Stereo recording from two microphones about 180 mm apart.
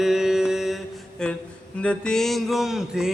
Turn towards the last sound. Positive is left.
turn(degrees=-5)  # may be behind; listen again after turning